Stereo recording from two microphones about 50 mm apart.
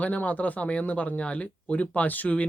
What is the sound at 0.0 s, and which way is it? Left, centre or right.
Speech, left.